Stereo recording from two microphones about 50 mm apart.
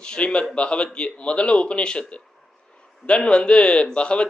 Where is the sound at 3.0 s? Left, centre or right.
Centre.